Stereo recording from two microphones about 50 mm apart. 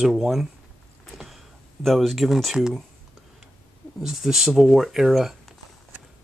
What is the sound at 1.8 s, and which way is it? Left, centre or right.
Speech, centre.